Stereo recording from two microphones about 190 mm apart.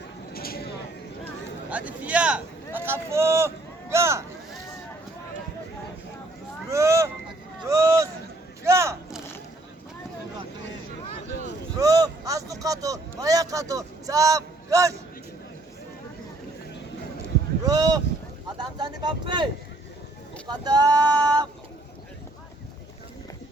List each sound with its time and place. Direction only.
0.3 s a sound: 50° left (ahead or behind)
1.7 s speech: 5° right (ahead or behind)
6.7 s speech: 15° right (ahead or behind)
7.7 s a sound: 15° right (ahead or behind)
8.6 s speech: 15° right (ahead or behind)
11.8 s a man's voice: 20° right (ahead or behind)
17.2 s a sound: 20° right (ahead or behind)
18.4 s speech: 25° right (ahead or behind)
20.5 s speech: 20° right (ahead or behind)